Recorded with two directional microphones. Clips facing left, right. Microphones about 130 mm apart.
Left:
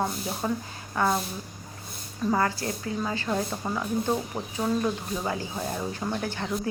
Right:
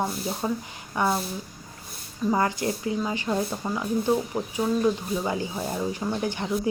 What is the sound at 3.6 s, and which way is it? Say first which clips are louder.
Speech: right 1 dB; 5° left (ahead or behind).